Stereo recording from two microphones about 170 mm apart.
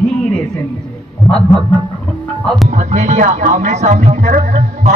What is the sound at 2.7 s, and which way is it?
Speech, 45° right (ahead or behind).